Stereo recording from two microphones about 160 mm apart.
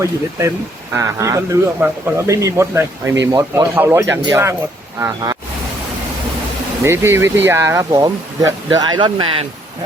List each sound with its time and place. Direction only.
0.0 s speech: 20° right (ahead or behind)
6.8 s speech: 15° right (ahead or behind); by 9.5 s 35° right (ahead or behind)